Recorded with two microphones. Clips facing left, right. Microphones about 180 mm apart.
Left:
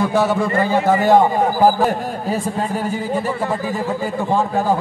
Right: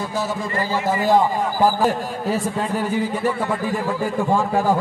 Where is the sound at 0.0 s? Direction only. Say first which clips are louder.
Left 8 dB; 65° left (ahead or behind).